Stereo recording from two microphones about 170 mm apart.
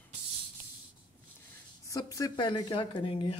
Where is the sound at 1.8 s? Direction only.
20° left (ahead or behind).